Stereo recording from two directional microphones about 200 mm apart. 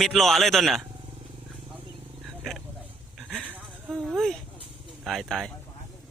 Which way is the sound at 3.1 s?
5° left (ahead or behind).